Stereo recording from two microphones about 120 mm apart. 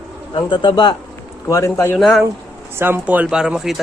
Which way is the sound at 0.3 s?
40° left (ahead or behind).